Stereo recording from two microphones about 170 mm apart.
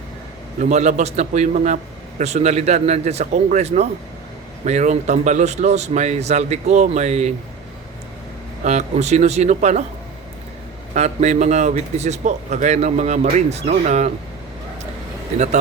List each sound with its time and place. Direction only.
0.6 s a man's voice: 40° right (ahead or behind)
8.6 s a man's voice: 40° right (ahead or behind)
10.9 s a man's voice: 40° right (ahead or behind)